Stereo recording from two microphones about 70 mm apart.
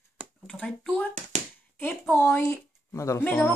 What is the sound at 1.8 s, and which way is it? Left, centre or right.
Speech, left.